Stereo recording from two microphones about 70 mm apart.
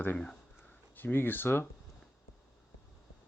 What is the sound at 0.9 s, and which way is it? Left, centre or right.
Speech, left.